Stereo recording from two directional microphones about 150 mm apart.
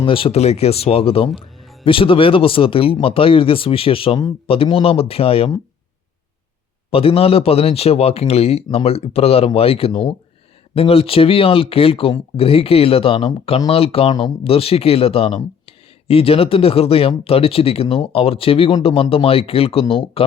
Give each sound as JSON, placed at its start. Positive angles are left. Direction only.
{"t": 0.0, "sound": "speech", "side_deg": 35}
{"t": 6.9, "sound": "speech", "side_deg": 40}